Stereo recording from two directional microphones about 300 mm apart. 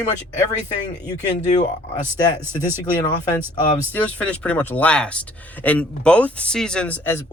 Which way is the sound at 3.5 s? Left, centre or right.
Centre.